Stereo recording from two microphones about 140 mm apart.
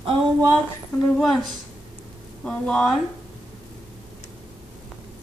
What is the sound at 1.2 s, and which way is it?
A woman's voice, centre (ahead or behind).